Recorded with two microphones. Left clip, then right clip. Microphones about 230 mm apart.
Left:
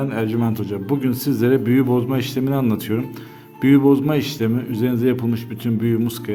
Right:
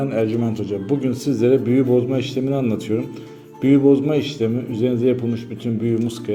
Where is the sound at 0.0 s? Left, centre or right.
Centre.